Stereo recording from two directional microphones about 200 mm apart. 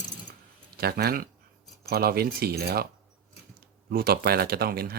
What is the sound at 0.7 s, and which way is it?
Speech, 50° right (ahead or behind).